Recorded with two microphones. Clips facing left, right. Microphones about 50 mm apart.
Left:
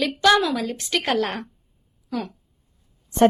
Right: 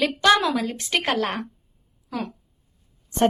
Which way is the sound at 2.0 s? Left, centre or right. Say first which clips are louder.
Left 1 dB; centre.